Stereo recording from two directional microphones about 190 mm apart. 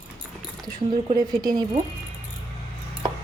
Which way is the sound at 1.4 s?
20° right (ahead or behind).